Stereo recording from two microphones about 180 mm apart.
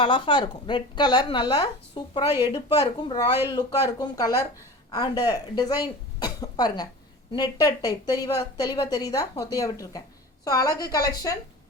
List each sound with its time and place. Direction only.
0.0 s a woman's voice: 25° left (ahead or behind)